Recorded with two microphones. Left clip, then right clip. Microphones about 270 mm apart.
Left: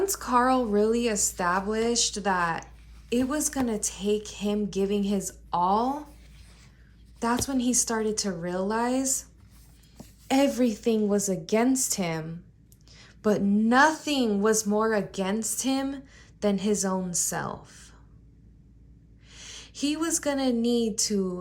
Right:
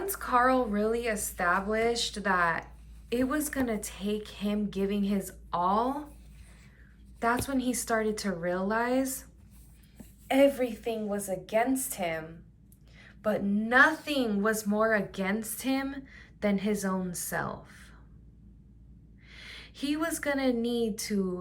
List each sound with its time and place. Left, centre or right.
0.0 s a woman's voice: centre
7.4 s a woman's voice: centre
10.2 s a woman's voice: left
19.3 s a woman's voice: centre